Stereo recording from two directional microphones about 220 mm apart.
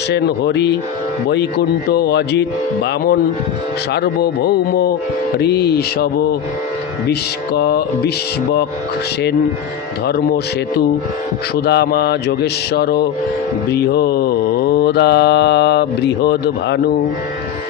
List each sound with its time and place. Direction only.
0.1 s mantra: 50° left (ahead or behind)
10.0 s mantra: 45° left (ahead or behind)
11.6 s mantra: 50° left (ahead or behind)